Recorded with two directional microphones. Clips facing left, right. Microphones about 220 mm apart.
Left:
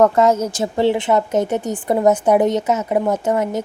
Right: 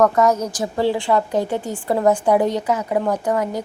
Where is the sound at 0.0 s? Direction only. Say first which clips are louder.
Left 2 dB; 25° left (ahead or behind).